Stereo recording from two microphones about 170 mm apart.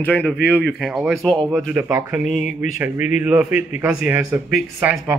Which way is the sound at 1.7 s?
15° right (ahead or behind).